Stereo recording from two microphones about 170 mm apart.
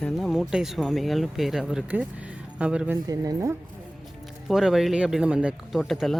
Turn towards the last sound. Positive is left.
turn(degrees=0)  # may be behind; listen again after turning